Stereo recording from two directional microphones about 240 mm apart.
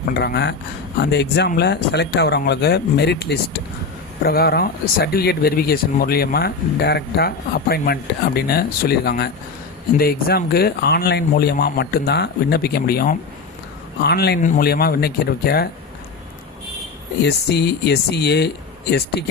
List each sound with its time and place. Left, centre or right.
0.1 s speech: left
17.2 s speech: left